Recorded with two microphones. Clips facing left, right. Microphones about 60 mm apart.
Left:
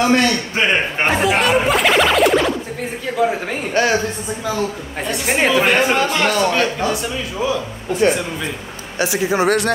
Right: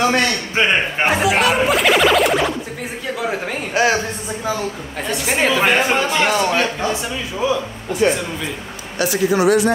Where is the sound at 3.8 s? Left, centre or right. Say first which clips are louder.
Right 1 dB; centre.